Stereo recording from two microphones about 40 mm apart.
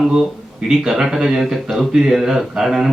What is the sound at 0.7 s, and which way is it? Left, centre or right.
Speech, centre.